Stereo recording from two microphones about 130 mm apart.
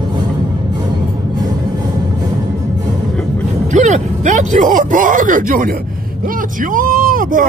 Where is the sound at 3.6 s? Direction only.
65° right (ahead or behind).